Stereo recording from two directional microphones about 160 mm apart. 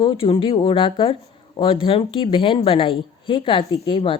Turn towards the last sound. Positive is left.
turn(degrees=35)  # may be behind; listen again after turning